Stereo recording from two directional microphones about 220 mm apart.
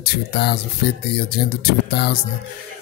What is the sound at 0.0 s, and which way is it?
Speech, 45° left (ahead or behind).